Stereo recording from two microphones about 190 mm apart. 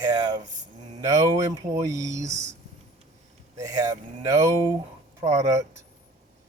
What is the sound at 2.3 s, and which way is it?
Speech, 35° right (ahead or behind).